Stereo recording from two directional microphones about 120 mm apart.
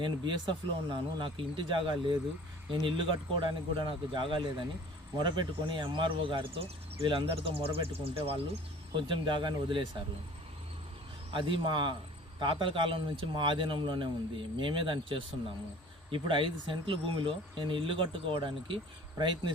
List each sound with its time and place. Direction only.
0.0 s speech: 40° right (ahead or behind)
9.0 s speech: 40° right (ahead or behind)
11.3 s speech: 45° right (ahead or behind)